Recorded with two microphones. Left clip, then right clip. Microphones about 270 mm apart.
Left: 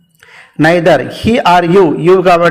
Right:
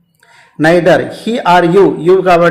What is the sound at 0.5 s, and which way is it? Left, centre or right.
Speech, left.